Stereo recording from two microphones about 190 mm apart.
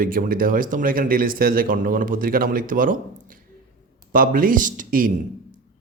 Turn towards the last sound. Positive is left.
turn(degrees=-45)  # may be behind; listen again after turning